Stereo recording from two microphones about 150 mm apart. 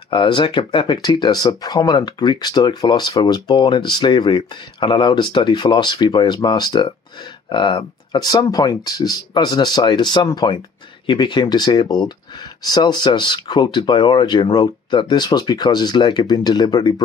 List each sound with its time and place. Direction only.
0.1 s speech: 35° left (ahead or behind)